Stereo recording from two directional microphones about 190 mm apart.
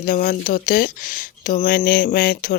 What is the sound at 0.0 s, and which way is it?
Speech, 50° left (ahead or behind).